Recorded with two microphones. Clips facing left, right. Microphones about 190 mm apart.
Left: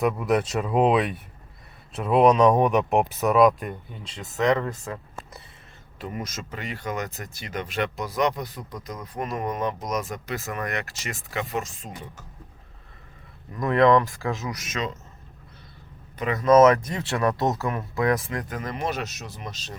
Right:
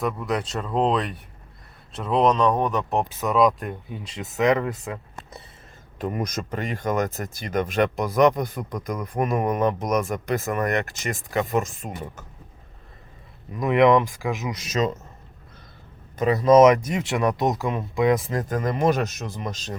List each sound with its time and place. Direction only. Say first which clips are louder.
0.0 s speech: left 3 dB; 5° left (ahead or behind)
3.2 s speech: left 1 dB; centre (ahead or behind)
6.0 s speech: right 6 dB; 50° right (ahead or behind)
13.5 s speech: right 1 dB; 20° right (ahead or behind)
14.7 s speech: right 8 dB; 40° right (ahead or behind)
16.1 s speech: right 6 dB; 35° right (ahead or behind)
16.5 s speech: right 1 dB; 20° right (ahead or behind)
18.3 s speech: right 6 dB; 40° right (ahead or behind)